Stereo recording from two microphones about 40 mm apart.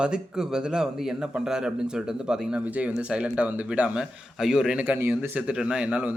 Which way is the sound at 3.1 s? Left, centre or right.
Right.